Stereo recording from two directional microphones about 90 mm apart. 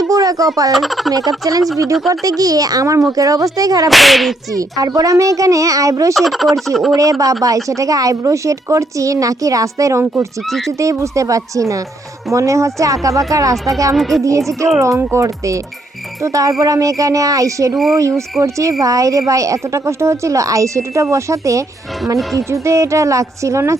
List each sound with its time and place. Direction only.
0.1 s frog: 40° right (ahead or behind)
0.7 s whip: centre (ahead or behind)
1.8 s speech: 40° right (ahead or behind)
3.8 s whip: centre (ahead or behind)
4.5 s speech: 40° right (ahead or behind)
6.1 s whip: centre (ahead or behind)
6.9 s speech: 40° right (ahead or behind)
13.9 s whip: centre (ahead or behind)
14.2 s speech: 35° right (ahead or behind)